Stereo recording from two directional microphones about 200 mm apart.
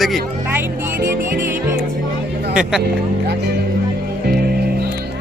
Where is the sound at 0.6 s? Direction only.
10° right (ahead or behind).